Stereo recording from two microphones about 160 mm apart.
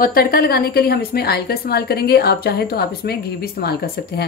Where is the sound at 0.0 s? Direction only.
70° left (ahead or behind).